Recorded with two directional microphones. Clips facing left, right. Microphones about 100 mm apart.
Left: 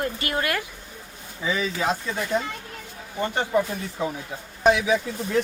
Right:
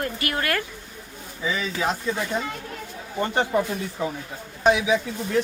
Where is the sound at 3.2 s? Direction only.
20° right (ahead or behind).